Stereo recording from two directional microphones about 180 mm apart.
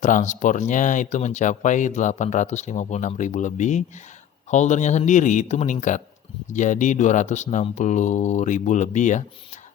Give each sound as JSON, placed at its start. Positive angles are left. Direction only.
{"t": 0.0, "sound": "speech", "side_deg": 45}